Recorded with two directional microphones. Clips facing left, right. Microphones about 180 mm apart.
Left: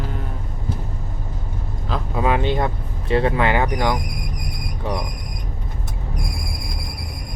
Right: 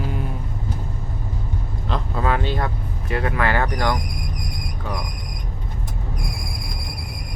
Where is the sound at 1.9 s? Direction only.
15° left (ahead or behind).